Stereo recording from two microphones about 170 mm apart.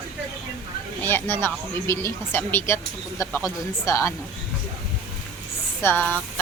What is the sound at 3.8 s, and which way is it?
Speech, 20° left (ahead or behind).